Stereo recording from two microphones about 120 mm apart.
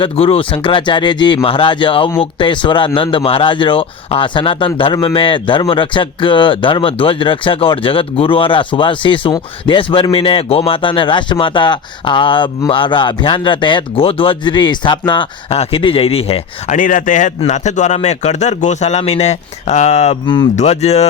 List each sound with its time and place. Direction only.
0.0 s speech: 50° left (ahead or behind)
15.4 s speech: 55° left (ahead or behind)
20.2 s speech: 45° left (ahead or behind)
20.6 s speech: 65° left (ahead or behind)